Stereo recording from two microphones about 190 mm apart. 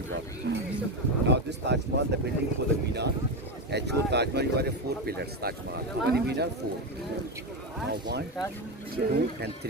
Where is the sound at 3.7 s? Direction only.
60° right (ahead or behind).